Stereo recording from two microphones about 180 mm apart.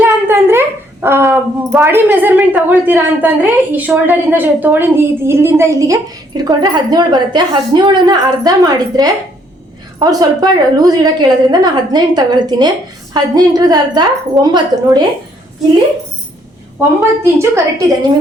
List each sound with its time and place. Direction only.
0.0 s a sound: 10° right (ahead or behind)
1.0 s a woman's voice: 15° right (ahead or behind)
17.3 s a woman's voice: 15° right (ahead or behind)